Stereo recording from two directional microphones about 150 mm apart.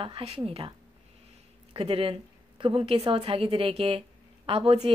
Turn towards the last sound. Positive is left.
turn(degrees=-40)  # may be behind; listen again after turning